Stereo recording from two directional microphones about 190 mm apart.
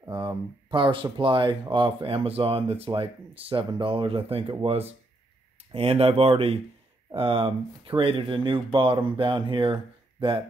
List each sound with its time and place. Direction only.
0.0 s speech: 20° right (ahead or behind)